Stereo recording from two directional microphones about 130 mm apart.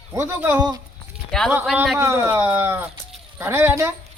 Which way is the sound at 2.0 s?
20° right (ahead or behind).